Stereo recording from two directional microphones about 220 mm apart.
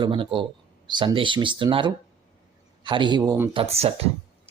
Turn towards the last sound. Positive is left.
turn(degrees=-25)  # may be behind; listen again after turning